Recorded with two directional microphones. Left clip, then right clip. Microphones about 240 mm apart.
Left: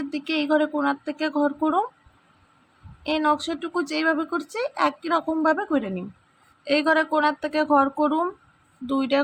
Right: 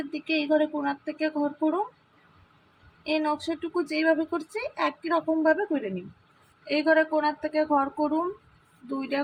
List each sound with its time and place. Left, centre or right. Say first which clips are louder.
0.3 s speech: left 2 dB; left
3.1 s speech: left 4 dB; left